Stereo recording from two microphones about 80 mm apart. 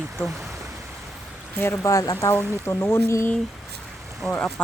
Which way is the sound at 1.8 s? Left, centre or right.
Left.